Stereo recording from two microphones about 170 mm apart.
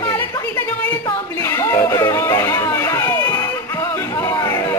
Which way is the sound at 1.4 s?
15° left (ahead or behind).